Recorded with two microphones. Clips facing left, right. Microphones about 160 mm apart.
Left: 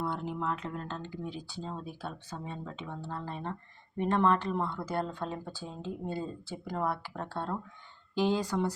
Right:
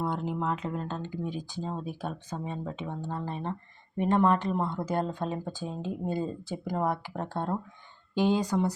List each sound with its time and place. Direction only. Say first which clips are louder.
0.4 s speech: right 4 dB; 15° right (ahead or behind)